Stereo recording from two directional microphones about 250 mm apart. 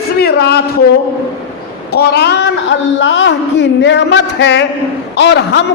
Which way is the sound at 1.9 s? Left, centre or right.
Left.